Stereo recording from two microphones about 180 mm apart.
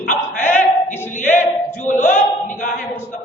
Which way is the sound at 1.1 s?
45° left (ahead or behind).